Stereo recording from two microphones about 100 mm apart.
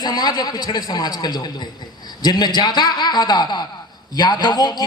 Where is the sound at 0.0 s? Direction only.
40° left (ahead or behind).